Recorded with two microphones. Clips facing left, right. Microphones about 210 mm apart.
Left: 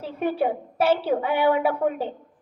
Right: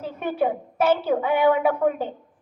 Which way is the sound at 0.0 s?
35° left (ahead or behind).